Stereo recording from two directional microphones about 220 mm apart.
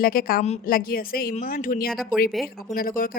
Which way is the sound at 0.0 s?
40° left (ahead or behind).